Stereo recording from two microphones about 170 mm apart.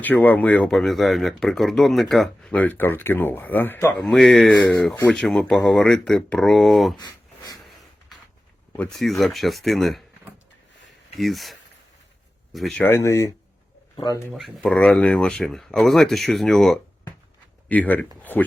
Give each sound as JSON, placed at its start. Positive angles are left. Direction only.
{"t": 0.0, "sound": "speech", "side_deg": 10}
{"t": 4.0, "sound": "speech", "side_deg": 5}
{"t": 6.9, "sound": "a sound", "side_deg": 25}
{"t": 8.7, "sound": "speech", "side_deg": 5}
{"t": 11.2, "sound": "speech", "side_deg": 0}
{"t": 12.5, "sound": "speech", "side_deg": 0}
{"t": 12.8, "sound": "speech", "side_deg": 15}
{"t": 14.3, "sound": "speech", "side_deg": 5}